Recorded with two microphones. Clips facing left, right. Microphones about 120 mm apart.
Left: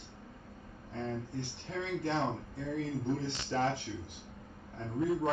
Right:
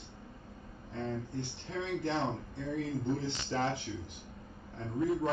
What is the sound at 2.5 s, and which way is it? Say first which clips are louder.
Speech: even; 25° right (ahead or behind).